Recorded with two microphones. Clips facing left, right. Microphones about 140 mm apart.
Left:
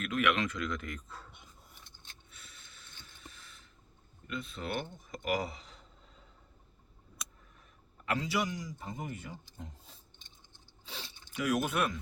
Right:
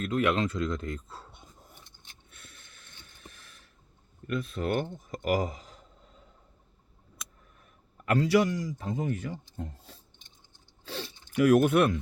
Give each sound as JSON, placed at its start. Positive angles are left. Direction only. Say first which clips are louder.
{"t": 0.0, "sound": "speech", "louder": "right 4 dB", "side_deg": -30}
{"t": 2.3, "sound": "boat", "louder": "right 5 dB", "side_deg": -55}
{"t": 4.3, "sound": "speech", "louder": "right 8 dB", "side_deg": -50}
{"t": 8.0, "sound": "speech", "louder": "right 9 dB", "side_deg": -55}
{"t": 10.8, "sound": "zipper", "louder": "right 9 dB", "side_deg": -65}